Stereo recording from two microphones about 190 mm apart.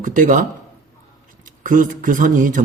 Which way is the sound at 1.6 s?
45° right (ahead or behind).